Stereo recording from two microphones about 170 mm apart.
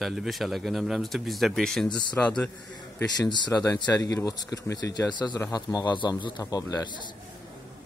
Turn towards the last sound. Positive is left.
turn(degrees=25)  # may be behind; listen again after turning